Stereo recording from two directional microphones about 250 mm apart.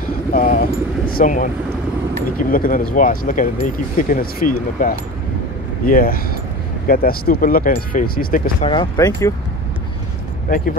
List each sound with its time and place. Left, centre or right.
0.3 s speech: left
2.5 s speech: left
8.6 s speech: centre